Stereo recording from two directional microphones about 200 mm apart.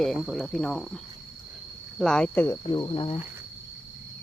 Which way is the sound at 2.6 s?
25° left (ahead or behind).